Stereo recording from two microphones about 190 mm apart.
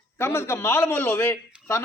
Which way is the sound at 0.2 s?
15° left (ahead or behind).